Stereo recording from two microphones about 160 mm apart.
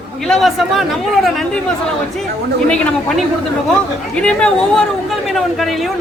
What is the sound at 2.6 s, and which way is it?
Speech, 5° left (ahead or behind).